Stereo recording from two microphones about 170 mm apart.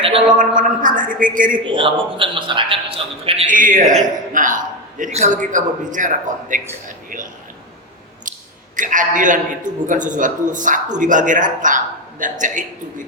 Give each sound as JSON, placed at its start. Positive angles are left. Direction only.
{"t": 0.3, "sound": "a man's voice", "side_deg": -50}
{"t": 1.6, "sound": "a man's voice", "side_deg": -30}
{"t": 3.5, "sound": "a man's voice", "side_deg": -50}
{"t": 8.7, "sound": "a man's voice", "side_deg": -50}